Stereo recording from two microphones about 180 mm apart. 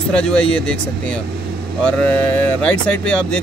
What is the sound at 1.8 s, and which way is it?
Speech, 10° left (ahead or behind).